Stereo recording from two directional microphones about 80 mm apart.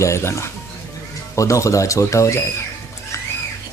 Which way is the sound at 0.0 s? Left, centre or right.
Left.